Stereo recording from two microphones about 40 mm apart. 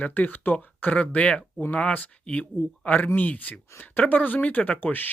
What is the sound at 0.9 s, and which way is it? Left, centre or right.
Speech, left.